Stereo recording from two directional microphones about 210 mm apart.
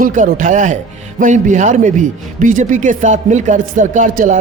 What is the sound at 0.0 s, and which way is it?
A man's voice, 40° right (ahead or behind).